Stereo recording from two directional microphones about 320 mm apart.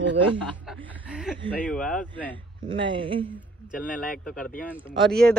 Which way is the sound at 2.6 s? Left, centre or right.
Centre.